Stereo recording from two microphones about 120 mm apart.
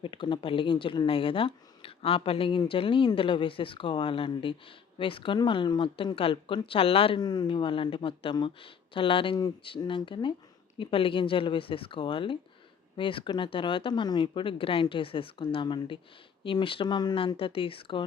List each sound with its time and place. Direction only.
0.0 s speech: 45° left (ahead or behind)
7.2 s speech: 35° left (ahead or behind)
17.2 s speech: 50° left (ahead or behind)